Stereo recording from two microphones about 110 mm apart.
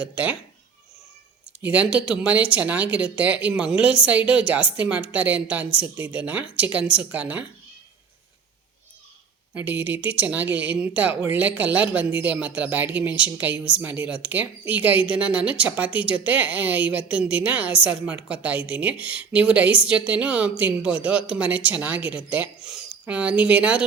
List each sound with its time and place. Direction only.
0.0 s a woman's voice: 15° right (ahead or behind)
1.6 s a woman's voice: 10° right (ahead or behind)
9.6 s a woman's voice: 15° right (ahead or behind)